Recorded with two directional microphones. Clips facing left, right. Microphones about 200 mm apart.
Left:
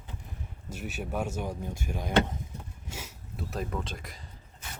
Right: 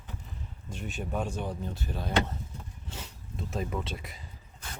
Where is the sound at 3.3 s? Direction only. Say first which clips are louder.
Right 1 dB; centre (ahead or behind).